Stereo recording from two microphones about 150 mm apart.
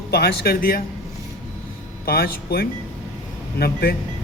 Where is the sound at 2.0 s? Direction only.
90° left.